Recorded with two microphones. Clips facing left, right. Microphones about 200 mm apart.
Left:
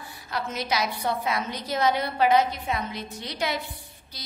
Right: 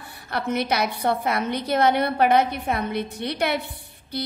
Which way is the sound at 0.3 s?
60° right (ahead or behind).